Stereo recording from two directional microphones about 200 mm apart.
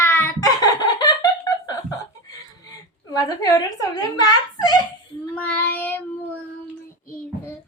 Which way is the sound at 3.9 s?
20° left (ahead or behind).